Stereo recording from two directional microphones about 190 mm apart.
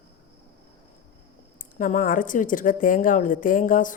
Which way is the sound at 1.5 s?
45° left (ahead or behind).